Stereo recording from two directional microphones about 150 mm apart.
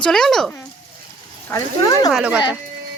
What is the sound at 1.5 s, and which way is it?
Speech, 25° left (ahead or behind).